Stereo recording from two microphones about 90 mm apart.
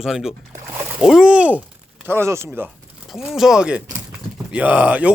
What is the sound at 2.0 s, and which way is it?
Speech, 30° right (ahead or behind).